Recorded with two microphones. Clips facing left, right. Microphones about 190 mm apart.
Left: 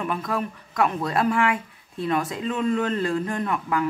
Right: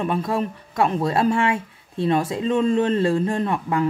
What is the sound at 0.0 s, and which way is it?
Speech, 30° right (ahead or behind).